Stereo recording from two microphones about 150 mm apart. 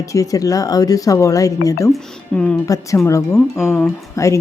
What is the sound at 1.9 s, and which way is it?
Speech, 5° left (ahead or behind).